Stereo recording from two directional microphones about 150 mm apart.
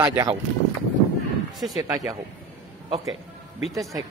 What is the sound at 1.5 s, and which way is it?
Speech, centre (ahead or behind).